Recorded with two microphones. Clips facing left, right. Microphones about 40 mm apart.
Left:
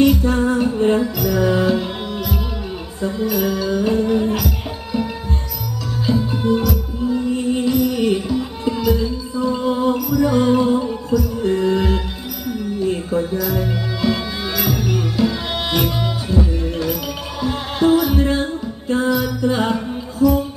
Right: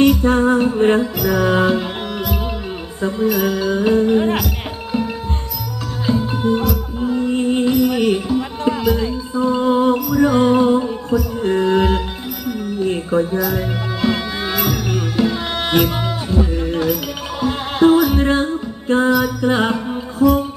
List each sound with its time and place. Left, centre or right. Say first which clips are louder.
0.2 s music: right 3 dB; right
6.3 s music: even; right